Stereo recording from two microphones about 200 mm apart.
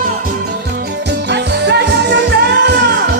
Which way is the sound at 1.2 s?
60° right (ahead or behind).